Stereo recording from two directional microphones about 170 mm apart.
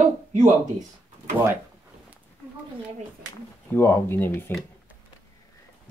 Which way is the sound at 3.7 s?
15° left (ahead or behind).